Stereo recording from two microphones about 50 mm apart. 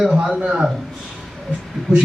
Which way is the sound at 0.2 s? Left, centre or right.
Right.